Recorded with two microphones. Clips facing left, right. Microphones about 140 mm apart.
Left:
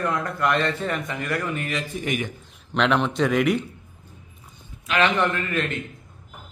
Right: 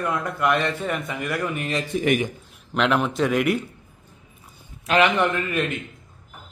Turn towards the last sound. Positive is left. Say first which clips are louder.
# right 1 dB
turn(degrees=-15)  # may be behind; listen again after turning